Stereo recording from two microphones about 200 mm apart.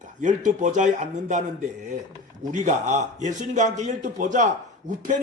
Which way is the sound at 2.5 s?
40° right (ahead or behind).